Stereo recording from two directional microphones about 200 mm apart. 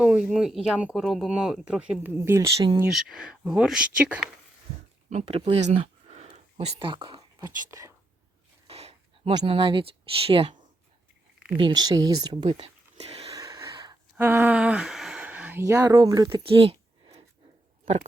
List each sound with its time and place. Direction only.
0.0 s speech: 5° right (ahead or behind)
2.6 s speech: 25° right (ahead or behind)
2.8 s speech: centre (ahead or behind)
5.0 s speech: 35° right (ahead or behind); by 7.9 s 15° right (ahead or behind)
8.6 s speech: 30° right (ahead or behind)
13.3 s a sound: 15° right (ahead or behind)
14.2 s speech: 10° right (ahead or behind); by 17.2 s 30° right (ahead or behind)